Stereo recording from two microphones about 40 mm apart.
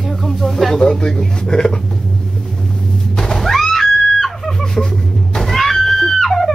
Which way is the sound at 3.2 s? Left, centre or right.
Centre.